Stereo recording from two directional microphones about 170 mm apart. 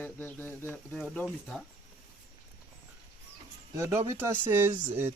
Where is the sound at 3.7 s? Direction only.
15° right (ahead or behind).